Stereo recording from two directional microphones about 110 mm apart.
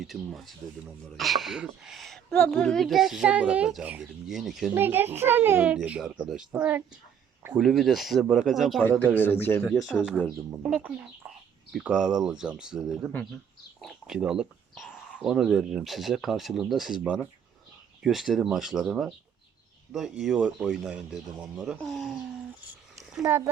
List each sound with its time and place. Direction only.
0.0 s speech: centre (ahead or behind)
4.7 s a child's voice: 20° right (ahead or behind)
6.5 s speech: 15° right (ahead or behind)
7.5 s speech: centre (ahead or behind)
9.1 s a man's voice: 20° left (ahead or behind)
9.9 s speech: 10° left (ahead or behind)
10.6 s speech: 10° right (ahead or behind)